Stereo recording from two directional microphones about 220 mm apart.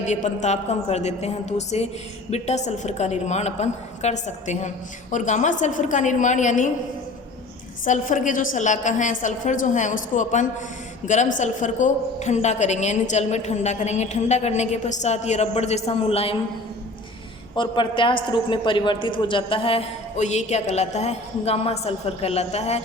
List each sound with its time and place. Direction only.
0.0 s a woman's voice: 35° left (ahead or behind)
7.9 s a woman's voice: 35° left (ahead or behind)
17.5 s a woman's voice: 20° left (ahead or behind)